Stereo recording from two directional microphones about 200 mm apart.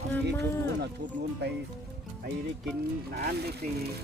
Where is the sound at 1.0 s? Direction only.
60° right (ahead or behind).